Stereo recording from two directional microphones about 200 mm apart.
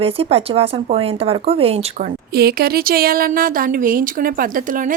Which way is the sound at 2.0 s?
50° right (ahead or behind).